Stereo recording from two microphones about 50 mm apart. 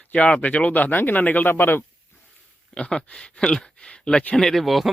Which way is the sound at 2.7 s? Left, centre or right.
Centre.